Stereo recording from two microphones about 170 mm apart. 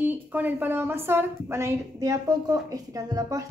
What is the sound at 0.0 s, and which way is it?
A woman's voice, 10° right (ahead or behind).